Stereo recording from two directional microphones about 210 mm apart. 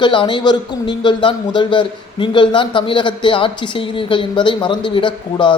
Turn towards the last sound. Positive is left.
turn(degrees=25)  # may be behind; listen again after turning